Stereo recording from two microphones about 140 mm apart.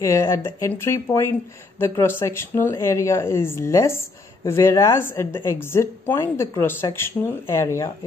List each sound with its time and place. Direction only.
0.0 s a woman's voice: 20° left (ahead or behind)